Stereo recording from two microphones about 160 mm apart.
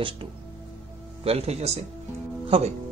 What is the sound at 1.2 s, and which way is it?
Speech, 40° right (ahead or behind).